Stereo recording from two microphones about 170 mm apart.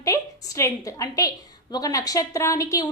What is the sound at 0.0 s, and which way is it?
A woman's voice, 15° left (ahead or behind).